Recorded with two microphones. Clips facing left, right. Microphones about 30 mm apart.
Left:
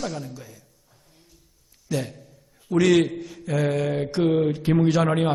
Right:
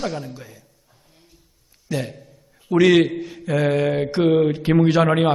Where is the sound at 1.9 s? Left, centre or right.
Right.